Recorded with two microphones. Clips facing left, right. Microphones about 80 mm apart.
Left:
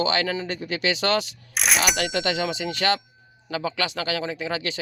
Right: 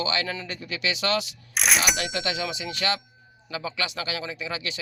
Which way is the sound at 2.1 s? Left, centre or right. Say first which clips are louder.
Left 4 dB; left.